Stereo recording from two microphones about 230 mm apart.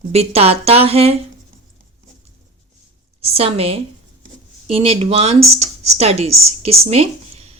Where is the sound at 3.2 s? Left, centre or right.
Right.